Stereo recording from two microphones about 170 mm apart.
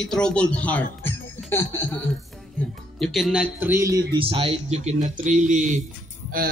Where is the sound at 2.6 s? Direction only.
Centre (ahead or behind).